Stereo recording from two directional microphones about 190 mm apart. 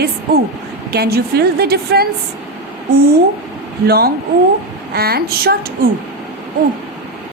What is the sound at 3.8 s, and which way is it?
A woman's voice, 55° right (ahead or behind).